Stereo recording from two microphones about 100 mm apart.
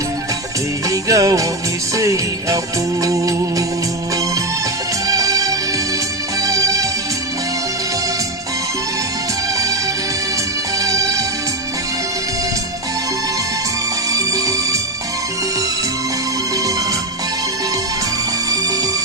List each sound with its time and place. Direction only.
0.9 s music: 35° right (ahead or behind)
5.0 s music: 35° right (ahead or behind)
10.8 s music: 35° right (ahead or behind)
14.1 s music: 35° right (ahead or behind)